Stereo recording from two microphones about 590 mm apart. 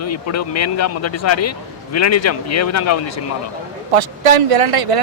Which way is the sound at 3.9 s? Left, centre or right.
Right.